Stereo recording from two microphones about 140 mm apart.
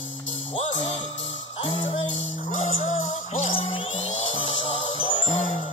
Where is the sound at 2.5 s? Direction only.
55° left (ahead or behind).